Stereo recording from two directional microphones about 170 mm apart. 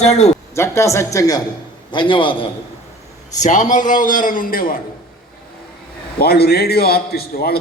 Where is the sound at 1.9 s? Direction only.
30° left (ahead or behind).